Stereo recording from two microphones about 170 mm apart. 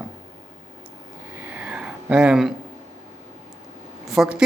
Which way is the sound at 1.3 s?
10° right (ahead or behind).